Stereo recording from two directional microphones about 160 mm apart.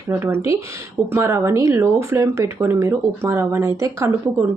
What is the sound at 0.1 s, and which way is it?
Speech, 15° right (ahead or behind).